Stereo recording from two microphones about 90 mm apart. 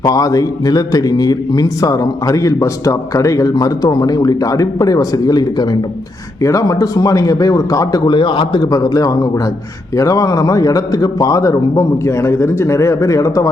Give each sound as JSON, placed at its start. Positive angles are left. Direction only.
{"t": 0.0, "sound": "a man's voice", "side_deg": 40}
{"t": 8.0, "sound": "a man's voice", "side_deg": 65}
{"t": 8.7, "sound": "a man's voice", "side_deg": 40}